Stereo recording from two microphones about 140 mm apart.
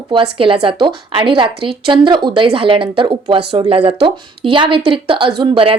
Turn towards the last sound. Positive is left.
turn(degrees=-40)  # may be behind; listen again after turning